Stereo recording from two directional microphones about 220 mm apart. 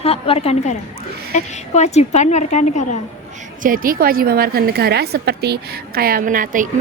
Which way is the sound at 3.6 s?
40° right (ahead or behind).